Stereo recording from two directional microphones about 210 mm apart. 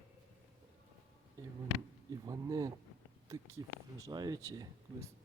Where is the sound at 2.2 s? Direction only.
15° right (ahead or behind).